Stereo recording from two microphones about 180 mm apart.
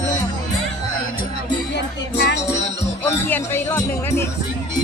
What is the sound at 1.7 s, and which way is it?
Music, 75° left (ahead or behind).